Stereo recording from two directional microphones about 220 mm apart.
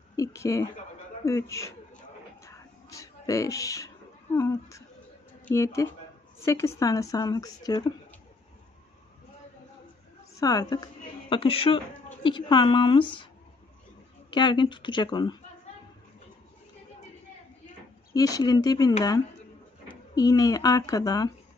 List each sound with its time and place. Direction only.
0.1 s a woman's voice: 15° left (ahead or behind)
2.4 s a sound: 15° left (ahead or behind)
5.4 s a woman's voice: 10° left (ahead or behind)
10.4 s a woman's voice: 15° left (ahead or behind)
14.3 s speech: 20° left (ahead or behind)
18.1 s a woman's voice: 15° left (ahead or behind)